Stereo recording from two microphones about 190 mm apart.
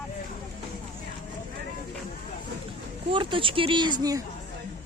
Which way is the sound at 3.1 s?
25° right (ahead or behind).